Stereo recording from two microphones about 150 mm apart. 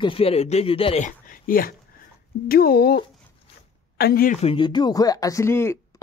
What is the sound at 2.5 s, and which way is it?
Speech, 90° left.